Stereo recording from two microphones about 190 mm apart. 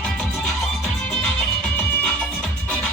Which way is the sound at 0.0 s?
5° left (ahead or behind).